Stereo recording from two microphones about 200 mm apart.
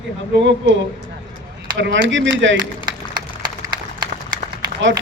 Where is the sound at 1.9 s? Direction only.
70° right (ahead or behind).